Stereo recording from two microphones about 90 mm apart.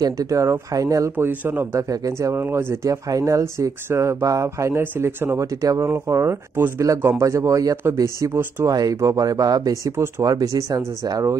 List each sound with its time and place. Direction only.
0.0 s speech: 40° right (ahead or behind)
1.1 s speech: 20° right (ahead or behind)
7.2 s speech: 35° right (ahead or behind)
8.6 s speech: 40° right (ahead or behind)